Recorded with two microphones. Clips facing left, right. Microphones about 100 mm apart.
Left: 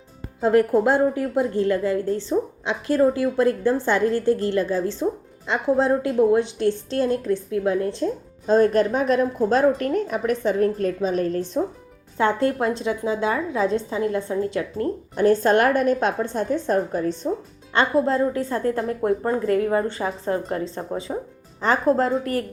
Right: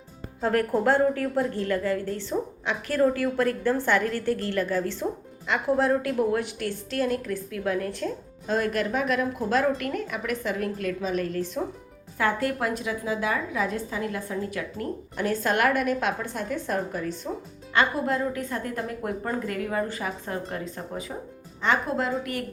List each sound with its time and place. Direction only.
0.4 s a woman's voice: 20° left (ahead or behind); by 22.4 s 35° left (ahead or behind)